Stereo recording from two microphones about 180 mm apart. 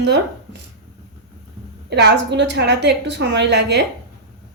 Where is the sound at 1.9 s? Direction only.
70° right (ahead or behind).